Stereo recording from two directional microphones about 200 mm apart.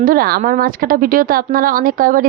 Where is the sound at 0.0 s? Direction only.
45° right (ahead or behind).